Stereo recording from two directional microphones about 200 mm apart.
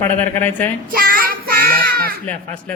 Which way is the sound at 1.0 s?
45° right (ahead or behind).